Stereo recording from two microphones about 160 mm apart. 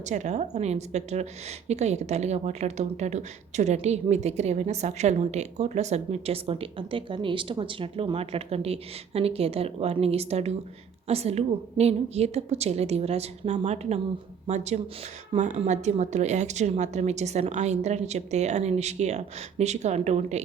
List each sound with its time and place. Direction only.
0.1 s a woman's voice: 50° right (ahead or behind)